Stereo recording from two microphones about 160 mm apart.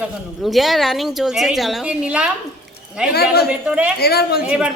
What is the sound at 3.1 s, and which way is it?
Speech, 70° left (ahead or behind).